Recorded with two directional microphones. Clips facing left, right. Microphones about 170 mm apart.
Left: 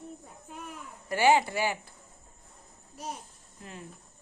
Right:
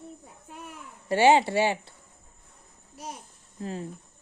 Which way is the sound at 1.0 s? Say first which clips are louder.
Right 4 dB; 25° right (ahead or behind).